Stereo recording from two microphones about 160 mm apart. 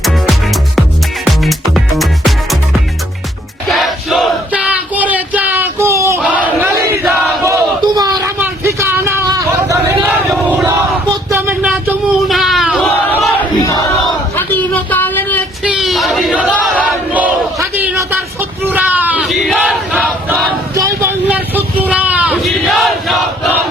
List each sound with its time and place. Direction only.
0.0 s music: centre (ahead or behind)
3.7 s battle cry: centre (ahead or behind)
6.4 s crowd: 15° right (ahead or behind)
7.0 s battle cry: centre (ahead or behind)
7.4 s a sound: 20° right (ahead or behind)
9.6 s vehicle: 20° right (ahead or behind)
11.3 s a sound: 15° right (ahead or behind)
11.6 s battle cry: 5° right (ahead or behind); by 13.7 s 10° left (ahead or behind)
14.3 s a sound: 10° left (ahead or behind)
15.6 s crowd: 5° right (ahead or behind)
16.6 s battle cry: 5° left (ahead or behind)
17.2 s a sound: 10° right (ahead or behind)